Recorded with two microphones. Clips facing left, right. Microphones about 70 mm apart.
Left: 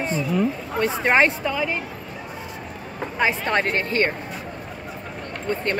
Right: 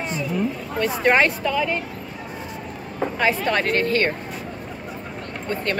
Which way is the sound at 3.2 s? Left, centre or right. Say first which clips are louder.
Even; left.